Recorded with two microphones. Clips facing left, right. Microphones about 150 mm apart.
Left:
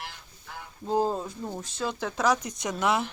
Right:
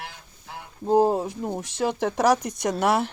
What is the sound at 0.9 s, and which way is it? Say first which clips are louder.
Speech: right 7 dB; 65° right (ahead or behind).